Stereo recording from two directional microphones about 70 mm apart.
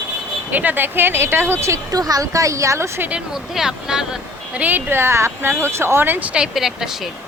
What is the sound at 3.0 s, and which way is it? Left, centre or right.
Speech, centre.